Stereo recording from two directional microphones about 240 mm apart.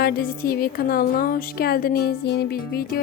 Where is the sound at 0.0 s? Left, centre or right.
Left.